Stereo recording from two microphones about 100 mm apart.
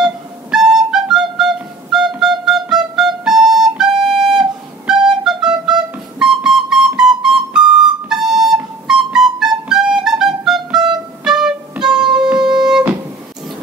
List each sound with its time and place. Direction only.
0.0 s music: 5° right (ahead or behind)
12.0 s music: 50° right (ahead or behind)
12.6 s music: 5° right (ahead or behind)